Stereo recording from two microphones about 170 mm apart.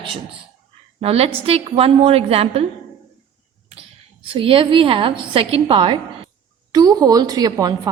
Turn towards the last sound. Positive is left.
turn(degrees=-25)  # may be behind; listen again after turning